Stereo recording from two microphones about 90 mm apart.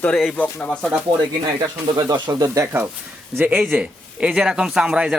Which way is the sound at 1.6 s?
45° right (ahead or behind).